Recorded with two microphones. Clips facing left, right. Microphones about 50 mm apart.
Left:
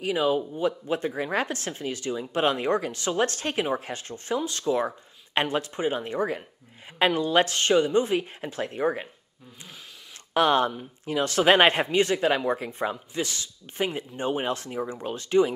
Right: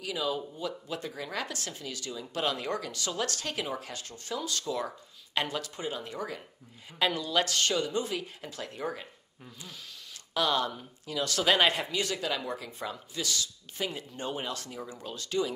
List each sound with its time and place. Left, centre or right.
0.0 s speech: left
10.3 s speech: left